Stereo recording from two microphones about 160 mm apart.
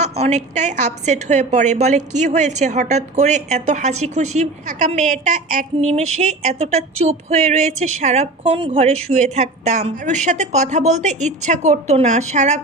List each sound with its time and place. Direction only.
0.0 s a woman's voice: 45° right (ahead or behind)